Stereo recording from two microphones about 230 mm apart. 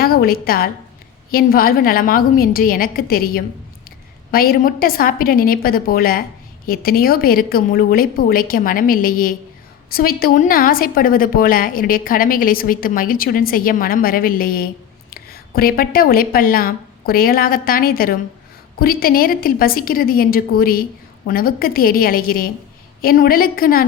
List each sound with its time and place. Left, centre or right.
0.0 s a woman's voice: left